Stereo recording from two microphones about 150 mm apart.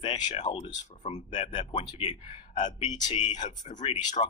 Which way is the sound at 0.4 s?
30° left (ahead or behind).